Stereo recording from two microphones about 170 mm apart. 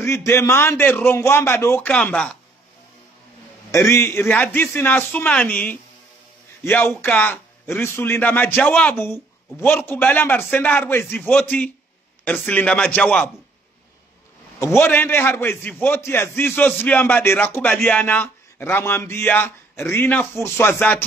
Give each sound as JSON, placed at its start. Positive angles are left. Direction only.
{"t": 0.0, "sound": "a man's voice", "side_deg": 15}
{"t": 3.7, "sound": "a man's voice", "side_deg": 15}
{"t": 12.4, "sound": "a man's voice", "side_deg": 10}
{"t": 14.6, "sound": "a man's voice", "side_deg": 10}